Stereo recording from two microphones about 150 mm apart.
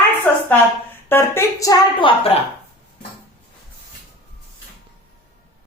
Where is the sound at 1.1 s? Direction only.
15° left (ahead or behind).